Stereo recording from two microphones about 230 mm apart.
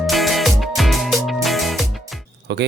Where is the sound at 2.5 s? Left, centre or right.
Right.